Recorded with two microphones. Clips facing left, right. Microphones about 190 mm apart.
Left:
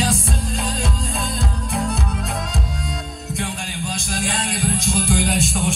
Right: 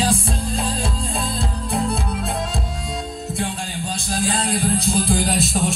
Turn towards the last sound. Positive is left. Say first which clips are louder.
# even
turn(degrees=-40)  # may be behind; listen again after turning